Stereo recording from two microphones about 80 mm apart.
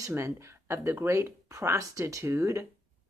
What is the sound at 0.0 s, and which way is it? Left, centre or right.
Speech, right.